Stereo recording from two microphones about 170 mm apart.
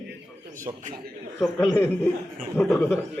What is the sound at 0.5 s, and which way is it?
Speech, 50° right (ahead or behind).